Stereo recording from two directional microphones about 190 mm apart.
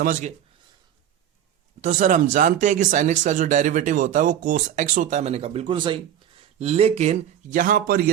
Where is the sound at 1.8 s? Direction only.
40° right (ahead or behind).